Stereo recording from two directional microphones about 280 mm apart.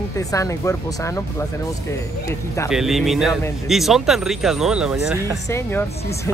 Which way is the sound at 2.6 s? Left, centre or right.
Centre.